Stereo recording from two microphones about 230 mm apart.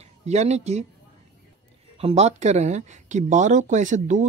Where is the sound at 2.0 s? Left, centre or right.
Right.